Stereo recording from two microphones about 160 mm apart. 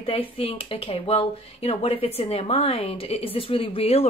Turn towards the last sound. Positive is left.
turn(degrees=40)  # may be behind; listen again after turning